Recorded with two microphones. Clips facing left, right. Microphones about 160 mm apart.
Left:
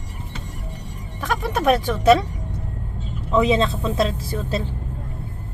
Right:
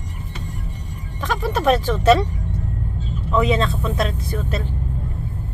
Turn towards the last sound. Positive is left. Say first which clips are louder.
# even
turn(degrees=25)  # may be behind; listen again after turning